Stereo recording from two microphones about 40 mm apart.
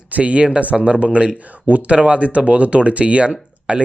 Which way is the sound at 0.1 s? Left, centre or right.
Right.